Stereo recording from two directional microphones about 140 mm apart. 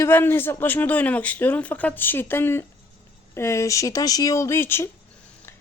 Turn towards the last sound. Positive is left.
turn(degrees=15)  # may be behind; listen again after turning